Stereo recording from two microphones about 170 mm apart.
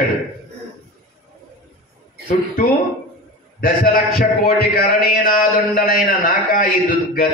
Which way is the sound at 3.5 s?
60° left (ahead or behind).